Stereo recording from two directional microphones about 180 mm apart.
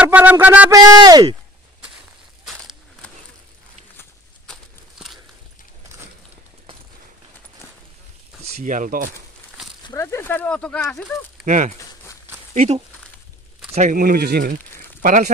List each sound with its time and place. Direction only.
0.0 s speech: 10° right (ahead or behind)
4.5 s a sound: centre (ahead or behind)
8.4 s speech: 40° right (ahead or behind)
10.0 s speech: 10° left (ahead or behind)
11.4 s speech: 45° right (ahead or behind)
12.5 s speech: 35° right (ahead or behind)
13.7 s speech: 45° right (ahead or behind)